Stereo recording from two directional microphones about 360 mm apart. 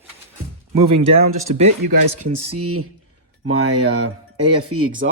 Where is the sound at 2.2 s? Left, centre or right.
Right.